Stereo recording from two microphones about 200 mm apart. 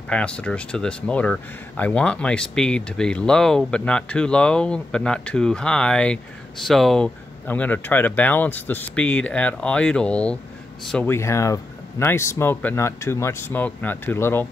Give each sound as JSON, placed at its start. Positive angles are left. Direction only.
{"t": 0.1, "sound": "speech", "side_deg": 5}